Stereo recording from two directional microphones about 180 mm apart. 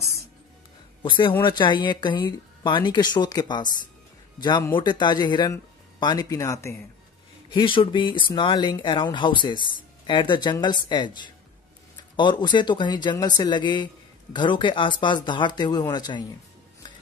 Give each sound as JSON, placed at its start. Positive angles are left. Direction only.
{"t": 1.0, "sound": "a man's voice", "side_deg": 25}
{"t": 7.5, "sound": "speech", "side_deg": 30}